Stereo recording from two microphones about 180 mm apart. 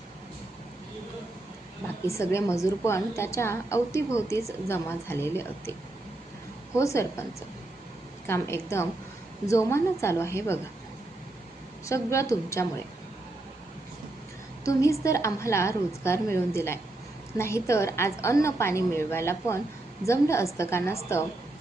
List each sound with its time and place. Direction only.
2.3 s a woman's voice: 15° left (ahead or behind)
6.7 s a woman's voice: 15° left (ahead or behind)
11.9 s a woman's voice: 15° left (ahead or behind)
14.6 s a woman's voice: 15° left (ahead or behind)